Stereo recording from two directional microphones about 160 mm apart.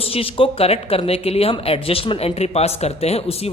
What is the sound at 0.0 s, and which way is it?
Speech, 35° left (ahead or behind).